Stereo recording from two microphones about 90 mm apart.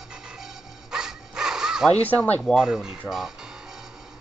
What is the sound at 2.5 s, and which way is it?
Speech, 5° right (ahead or behind).